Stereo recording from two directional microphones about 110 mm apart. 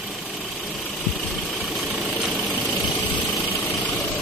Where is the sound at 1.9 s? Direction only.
5° right (ahead or behind).